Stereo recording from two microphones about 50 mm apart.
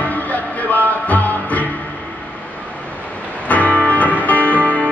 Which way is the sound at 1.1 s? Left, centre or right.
Left.